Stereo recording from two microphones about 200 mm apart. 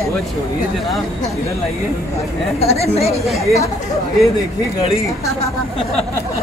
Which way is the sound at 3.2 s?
Centre (ahead or behind).